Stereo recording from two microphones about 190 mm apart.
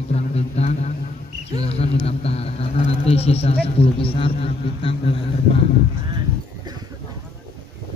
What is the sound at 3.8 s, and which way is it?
A man's voice, 30° left (ahead or behind).